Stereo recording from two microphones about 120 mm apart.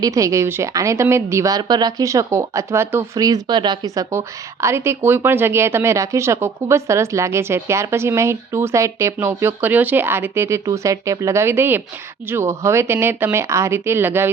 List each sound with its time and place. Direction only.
0.0 s speech: 30° right (ahead or behind)
3.2 s speech: 30° right (ahead or behind)